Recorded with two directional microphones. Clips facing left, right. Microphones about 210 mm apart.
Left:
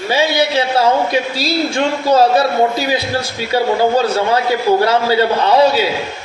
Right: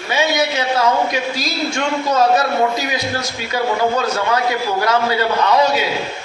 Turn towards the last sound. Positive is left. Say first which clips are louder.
# left 4 dB
turn(degrees=30)  # may be behind; listen again after turning